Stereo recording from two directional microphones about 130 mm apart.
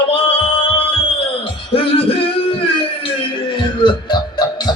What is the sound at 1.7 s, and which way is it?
Music, 45° left (ahead or behind).